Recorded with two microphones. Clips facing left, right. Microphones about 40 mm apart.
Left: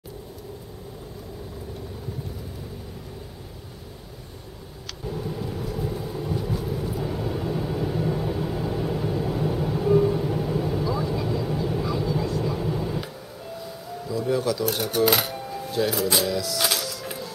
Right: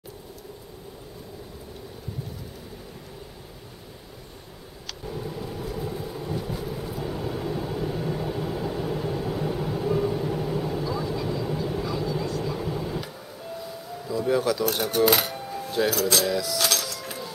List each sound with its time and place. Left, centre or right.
5.0 s vehicle: centre
13.6 s a sound: centre
15.9 s speech: centre
16.3 s music: centre
16.5 s music: centre